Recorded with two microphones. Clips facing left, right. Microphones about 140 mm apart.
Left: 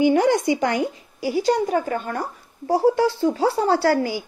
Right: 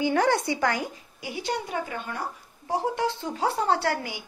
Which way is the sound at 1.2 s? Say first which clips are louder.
Left 11 dB; 40° left (ahead or behind).